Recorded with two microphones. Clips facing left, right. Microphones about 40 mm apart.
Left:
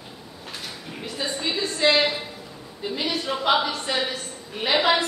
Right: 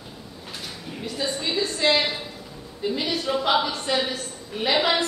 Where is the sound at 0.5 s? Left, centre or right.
Centre.